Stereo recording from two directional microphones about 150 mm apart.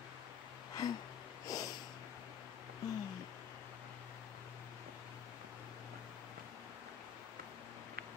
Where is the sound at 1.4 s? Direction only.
25° left (ahead or behind).